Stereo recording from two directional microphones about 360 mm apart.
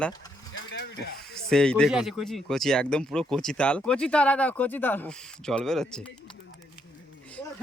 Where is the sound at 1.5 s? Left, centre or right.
Centre.